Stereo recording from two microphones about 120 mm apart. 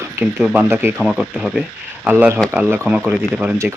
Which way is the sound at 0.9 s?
Centre (ahead or behind).